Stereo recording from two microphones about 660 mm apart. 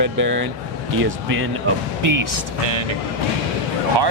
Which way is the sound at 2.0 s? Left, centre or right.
Right.